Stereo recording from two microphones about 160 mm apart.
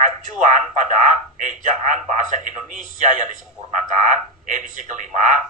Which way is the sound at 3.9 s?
50° right (ahead or behind).